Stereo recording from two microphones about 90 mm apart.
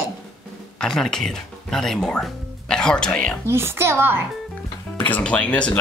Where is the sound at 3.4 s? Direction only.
30° right (ahead or behind).